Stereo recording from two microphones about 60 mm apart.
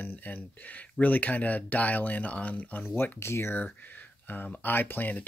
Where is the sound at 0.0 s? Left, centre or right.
Left.